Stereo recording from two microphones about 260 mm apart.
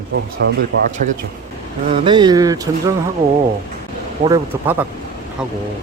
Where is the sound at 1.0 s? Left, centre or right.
Right.